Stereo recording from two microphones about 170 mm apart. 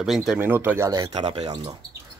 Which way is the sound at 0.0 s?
Centre (ahead or behind).